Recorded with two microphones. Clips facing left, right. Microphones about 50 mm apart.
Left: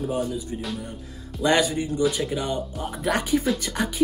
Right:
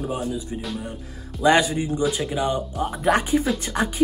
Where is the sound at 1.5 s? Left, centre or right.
Right.